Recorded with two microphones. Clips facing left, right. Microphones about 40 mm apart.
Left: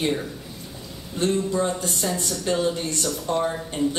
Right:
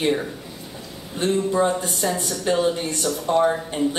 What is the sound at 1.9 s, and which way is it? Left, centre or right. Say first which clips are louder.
Speech: right 2 dB; centre.